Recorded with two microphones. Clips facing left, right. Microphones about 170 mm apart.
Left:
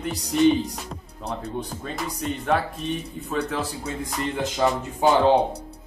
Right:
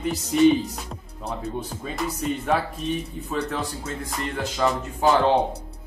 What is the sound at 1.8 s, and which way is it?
Speech, centre (ahead or behind).